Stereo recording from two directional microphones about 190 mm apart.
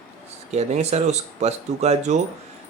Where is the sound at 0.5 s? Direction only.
35° right (ahead or behind).